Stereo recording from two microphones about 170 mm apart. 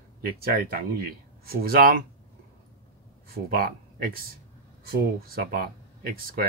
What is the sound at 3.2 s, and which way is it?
Speech, 60° right (ahead or behind).